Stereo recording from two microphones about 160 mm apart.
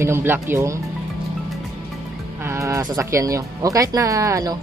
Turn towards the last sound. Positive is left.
turn(degrees=-20)  # may be behind; listen again after turning